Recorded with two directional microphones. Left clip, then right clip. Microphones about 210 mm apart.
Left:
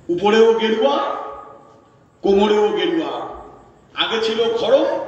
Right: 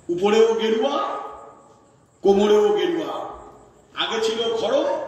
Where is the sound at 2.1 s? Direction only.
60° right (ahead or behind).